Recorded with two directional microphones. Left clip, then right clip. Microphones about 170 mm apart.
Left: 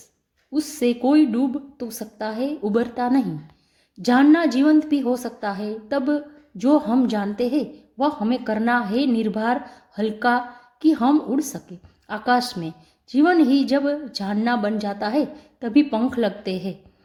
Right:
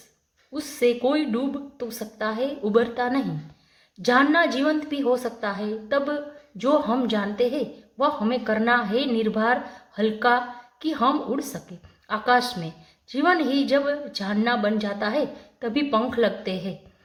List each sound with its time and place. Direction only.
0.5 s a woman's voice: 40° left (ahead or behind)